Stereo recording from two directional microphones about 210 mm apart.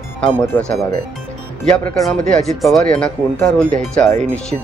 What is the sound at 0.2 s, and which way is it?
Speech, 5° left (ahead or behind).